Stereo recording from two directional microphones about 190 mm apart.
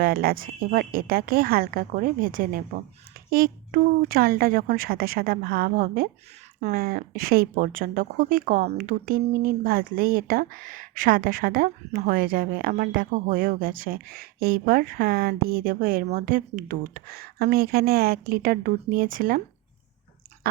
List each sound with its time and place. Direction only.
0.0 s speech: 55° right (ahead or behind)